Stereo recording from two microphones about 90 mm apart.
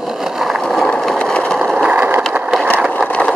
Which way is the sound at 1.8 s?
15° right (ahead or behind).